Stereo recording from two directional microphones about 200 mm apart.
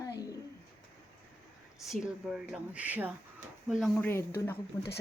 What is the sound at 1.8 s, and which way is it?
Speech, centre (ahead or behind).